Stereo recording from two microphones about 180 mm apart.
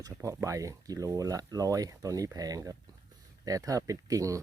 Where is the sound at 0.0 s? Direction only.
15° right (ahead or behind).